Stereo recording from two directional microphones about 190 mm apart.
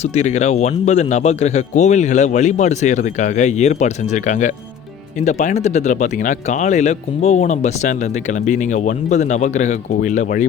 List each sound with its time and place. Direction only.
0.0 s speech: 35° left (ahead or behind)